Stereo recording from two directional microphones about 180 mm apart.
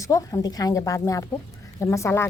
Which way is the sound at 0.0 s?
20° left (ahead or behind).